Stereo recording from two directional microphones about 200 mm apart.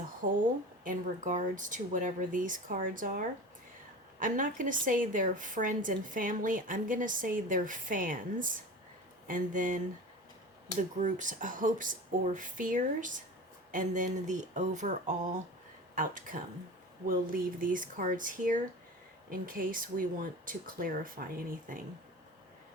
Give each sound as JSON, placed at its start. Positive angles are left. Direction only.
{"t": 0.2, "sound": "a woman's voice", "side_deg": -45}